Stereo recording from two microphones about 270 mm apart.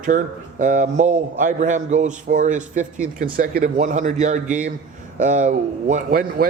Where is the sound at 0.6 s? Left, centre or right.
Right.